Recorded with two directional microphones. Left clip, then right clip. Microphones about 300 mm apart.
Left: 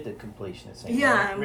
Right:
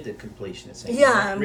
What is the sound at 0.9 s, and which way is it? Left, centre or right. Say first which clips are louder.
Speech: right 4 dB; centre.